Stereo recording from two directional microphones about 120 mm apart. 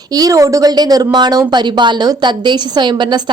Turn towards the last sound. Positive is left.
turn(degrees=-40)  # may be behind; listen again after turning